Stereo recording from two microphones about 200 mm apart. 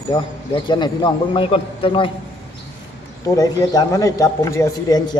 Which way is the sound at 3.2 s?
15° left (ahead or behind).